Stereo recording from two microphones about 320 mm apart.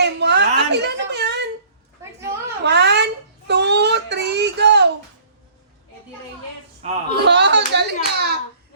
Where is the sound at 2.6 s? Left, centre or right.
Right.